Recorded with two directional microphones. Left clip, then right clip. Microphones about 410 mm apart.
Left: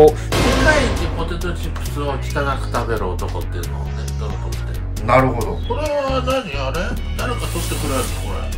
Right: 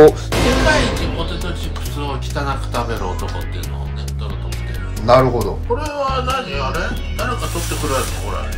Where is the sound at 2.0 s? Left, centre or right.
Centre.